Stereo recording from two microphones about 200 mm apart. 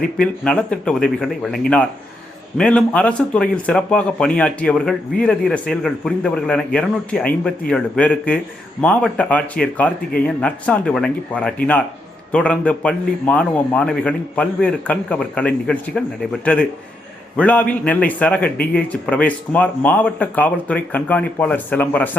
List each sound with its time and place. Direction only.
0.2 s speech: 5° left (ahead or behind)
2.6 s speech: 5° left (ahead or behind)